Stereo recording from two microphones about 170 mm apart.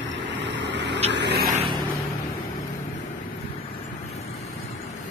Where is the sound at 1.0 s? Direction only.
90° right.